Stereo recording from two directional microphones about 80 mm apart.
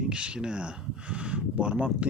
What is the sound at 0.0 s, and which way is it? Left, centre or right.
Speech, centre.